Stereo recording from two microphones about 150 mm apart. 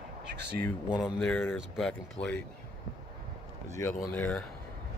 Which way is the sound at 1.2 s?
10° left (ahead or behind).